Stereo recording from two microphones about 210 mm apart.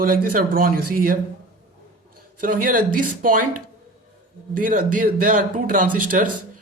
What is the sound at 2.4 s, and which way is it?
Speech, 40° right (ahead or behind).